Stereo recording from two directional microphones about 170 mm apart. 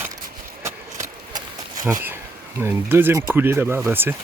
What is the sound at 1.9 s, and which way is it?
Speech, 10° right (ahead or behind).